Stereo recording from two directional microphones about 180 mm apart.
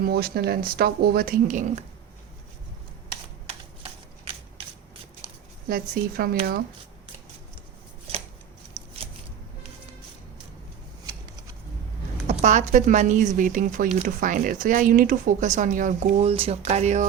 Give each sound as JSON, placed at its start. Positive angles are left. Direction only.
{"t": 0.0, "sound": "a woman's voice", "side_deg": -60}
{"t": 5.6, "sound": "a woman's voice", "side_deg": -55}
{"t": 8.7, "sound": "a sound", "side_deg": -30}
{"t": 12.3, "sound": "a woman's voice", "side_deg": -40}